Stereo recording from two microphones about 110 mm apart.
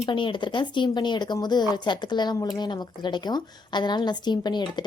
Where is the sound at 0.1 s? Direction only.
45° left (ahead or behind).